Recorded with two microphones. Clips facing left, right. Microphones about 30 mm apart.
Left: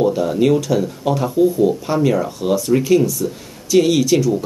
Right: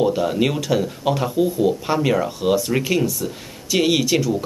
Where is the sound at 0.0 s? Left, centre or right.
Centre.